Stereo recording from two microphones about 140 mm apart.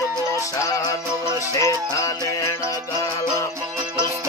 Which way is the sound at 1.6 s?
20° left (ahead or behind).